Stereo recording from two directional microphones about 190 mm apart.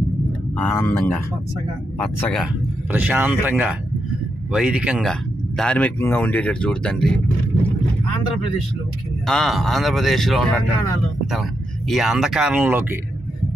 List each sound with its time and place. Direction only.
0.7 s speech: 10° left (ahead or behind)
2.3 s speech: 5° right (ahead or behind)
9.2 s speech: centre (ahead or behind)
11.9 s speech: centre (ahead or behind)